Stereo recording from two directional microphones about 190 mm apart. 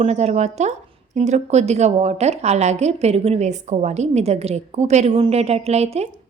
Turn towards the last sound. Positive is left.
turn(degrees=-35)  # may be behind; listen again after turning